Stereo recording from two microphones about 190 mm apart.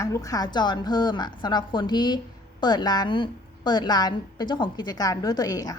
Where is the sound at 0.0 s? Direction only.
15° left (ahead or behind).